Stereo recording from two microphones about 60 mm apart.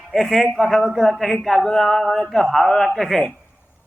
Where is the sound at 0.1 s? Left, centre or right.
Centre.